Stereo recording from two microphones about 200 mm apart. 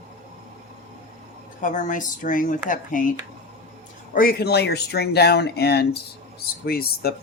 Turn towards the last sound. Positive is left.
turn(degrees=50)  # may be behind; listen again after turning